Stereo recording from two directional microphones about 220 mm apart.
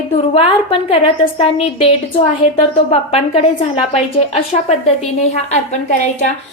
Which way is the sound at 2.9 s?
30° left (ahead or behind).